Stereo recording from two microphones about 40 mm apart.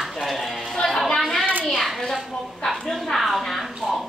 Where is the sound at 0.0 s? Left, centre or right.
Centre.